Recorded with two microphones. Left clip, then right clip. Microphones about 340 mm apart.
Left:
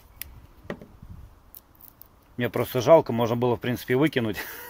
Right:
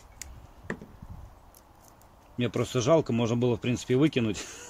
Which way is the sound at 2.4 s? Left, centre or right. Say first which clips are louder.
Left 3 dB; left.